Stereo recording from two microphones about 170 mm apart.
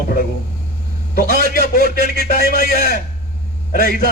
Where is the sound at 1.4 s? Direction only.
60° left (ahead or behind).